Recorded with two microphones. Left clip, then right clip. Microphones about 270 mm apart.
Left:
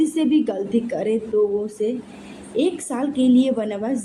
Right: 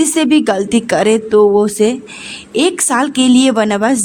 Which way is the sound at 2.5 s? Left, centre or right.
Right.